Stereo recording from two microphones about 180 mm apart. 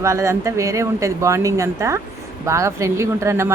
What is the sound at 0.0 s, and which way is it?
Speech, 15° right (ahead or behind).